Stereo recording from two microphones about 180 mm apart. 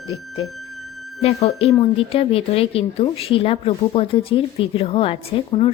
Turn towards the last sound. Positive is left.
turn(degrees=30)  # may be behind; listen again after turning